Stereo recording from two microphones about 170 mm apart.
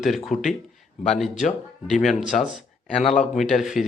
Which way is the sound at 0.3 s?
50° left (ahead or behind).